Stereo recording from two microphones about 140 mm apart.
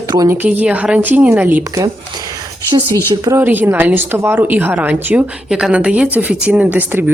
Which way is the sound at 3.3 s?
15° right (ahead or behind).